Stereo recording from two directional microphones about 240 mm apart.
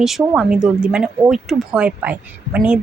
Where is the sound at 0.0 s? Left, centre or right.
Centre.